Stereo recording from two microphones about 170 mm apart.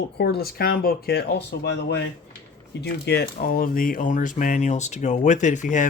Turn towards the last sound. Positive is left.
turn(degrees=45)  # may be behind; listen again after turning